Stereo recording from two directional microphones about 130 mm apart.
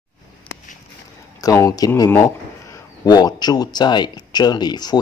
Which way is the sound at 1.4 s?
25° left (ahead or behind).